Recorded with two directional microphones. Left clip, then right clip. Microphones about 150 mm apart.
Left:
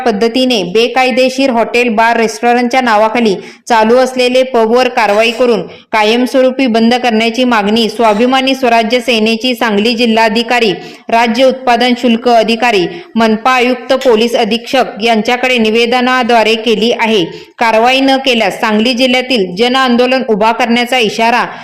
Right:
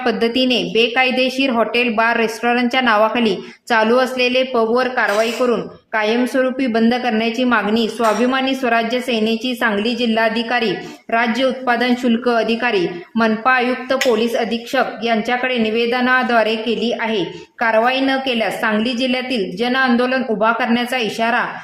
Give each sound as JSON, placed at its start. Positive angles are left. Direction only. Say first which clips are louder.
{"t": 0.0, "sound": "speech", "louder": "left 6 dB", "side_deg": 30}
{"t": 4.5, "sound": "a woman's voice", "louder": "left 7 dB", "side_deg": 40}